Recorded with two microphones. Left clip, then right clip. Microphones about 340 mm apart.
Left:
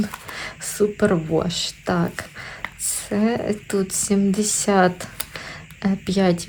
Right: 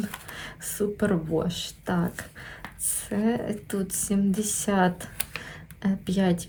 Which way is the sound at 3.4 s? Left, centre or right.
Left.